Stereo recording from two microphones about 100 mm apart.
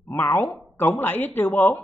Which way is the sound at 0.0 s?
20° left (ahead or behind).